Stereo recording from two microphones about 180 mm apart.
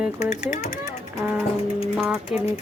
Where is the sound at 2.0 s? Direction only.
5° right (ahead or behind).